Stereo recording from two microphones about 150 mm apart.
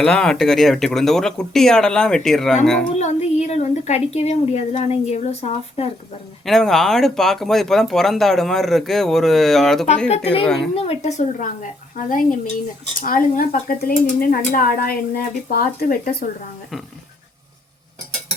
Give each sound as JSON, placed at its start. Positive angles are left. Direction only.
{"t": 0.0, "sound": "speech", "side_deg": 5}
{"t": 2.9, "sound": "a woman's voice", "side_deg": 50}
{"t": 6.4, "sound": "speech", "side_deg": 0}
{"t": 10.8, "sound": "a woman's voice", "side_deg": 45}